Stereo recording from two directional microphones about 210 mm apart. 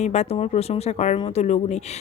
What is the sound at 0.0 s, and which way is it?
Speech, 30° left (ahead or behind).